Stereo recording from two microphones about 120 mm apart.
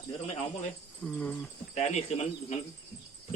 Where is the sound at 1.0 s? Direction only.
15° left (ahead or behind).